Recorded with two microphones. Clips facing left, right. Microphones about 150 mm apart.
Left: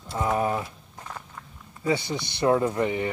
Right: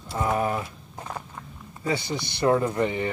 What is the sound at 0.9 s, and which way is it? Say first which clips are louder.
Walk: right 5 dB; 30° right (ahead or behind).